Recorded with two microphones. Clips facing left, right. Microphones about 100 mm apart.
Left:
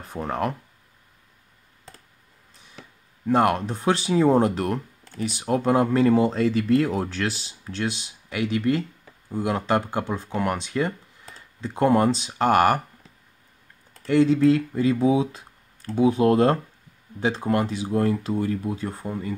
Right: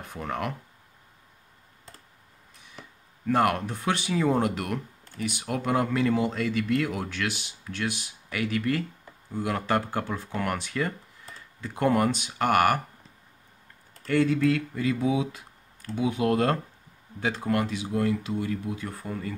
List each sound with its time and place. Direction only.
0.1 s speech: 35° left (ahead or behind)
3.3 s speech: 25° left (ahead or behind)
14.0 s speech: 20° left (ahead or behind)